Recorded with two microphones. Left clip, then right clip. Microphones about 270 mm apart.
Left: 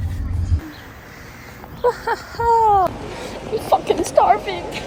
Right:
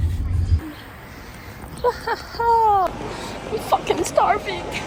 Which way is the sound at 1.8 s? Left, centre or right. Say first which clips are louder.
Left 3 dB; centre.